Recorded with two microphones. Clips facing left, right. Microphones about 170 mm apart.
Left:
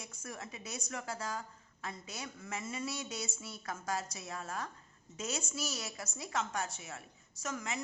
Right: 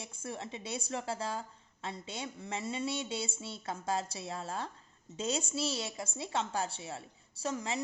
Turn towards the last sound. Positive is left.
turn(degrees=-30)  # may be behind; listen again after turning